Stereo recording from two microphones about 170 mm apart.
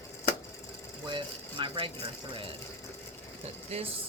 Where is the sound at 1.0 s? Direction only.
30° right (ahead or behind).